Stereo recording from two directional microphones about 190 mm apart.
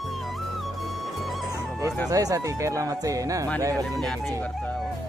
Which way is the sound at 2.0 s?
15° right (ahead or behind).